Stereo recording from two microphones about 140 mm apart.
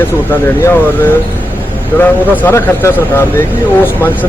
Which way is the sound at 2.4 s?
20° left (ahead or behind).